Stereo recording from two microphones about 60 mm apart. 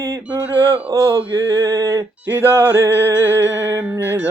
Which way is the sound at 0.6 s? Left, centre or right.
Right.